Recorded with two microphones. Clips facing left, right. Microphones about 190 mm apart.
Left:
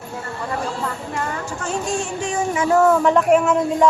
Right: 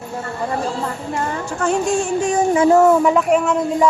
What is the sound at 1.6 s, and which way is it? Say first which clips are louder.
Speech: right 7 dB; 50° right (ahead or behind).